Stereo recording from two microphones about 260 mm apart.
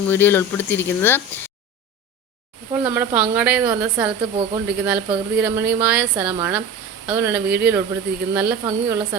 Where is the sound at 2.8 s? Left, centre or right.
Centre.